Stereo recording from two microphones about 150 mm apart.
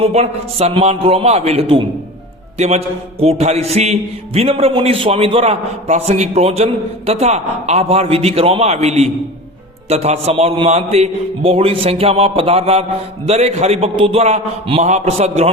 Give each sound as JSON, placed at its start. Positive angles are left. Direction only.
{"t": 0.0, "sound": "a man's voice", "side_deg": -45}